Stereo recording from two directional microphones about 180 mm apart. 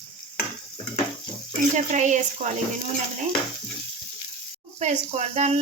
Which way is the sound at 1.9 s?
40° right (ahead or behind).